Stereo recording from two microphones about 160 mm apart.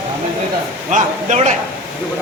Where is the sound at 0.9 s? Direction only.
50° right (ahead or behind).